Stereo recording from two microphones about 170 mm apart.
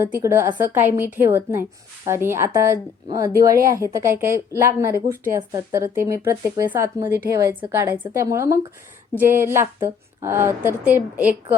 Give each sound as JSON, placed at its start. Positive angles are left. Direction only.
{"t": 0.2, "sound": "speech", "side_deg": -15}